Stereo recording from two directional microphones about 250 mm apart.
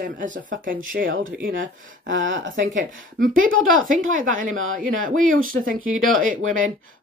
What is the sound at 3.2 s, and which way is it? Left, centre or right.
Speech, right.